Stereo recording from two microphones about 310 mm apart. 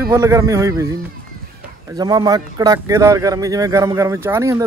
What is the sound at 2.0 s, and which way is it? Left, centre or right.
Speech, centre.